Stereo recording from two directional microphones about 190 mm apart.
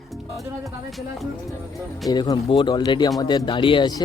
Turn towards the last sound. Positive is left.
turn(degrees=20)  # may be behind; listen again after turning